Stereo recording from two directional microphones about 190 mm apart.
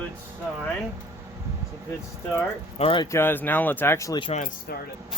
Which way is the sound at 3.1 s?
10° left (ahead or behind).